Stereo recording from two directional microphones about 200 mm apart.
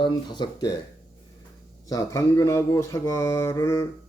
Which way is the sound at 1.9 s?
15° left (ahead or behind).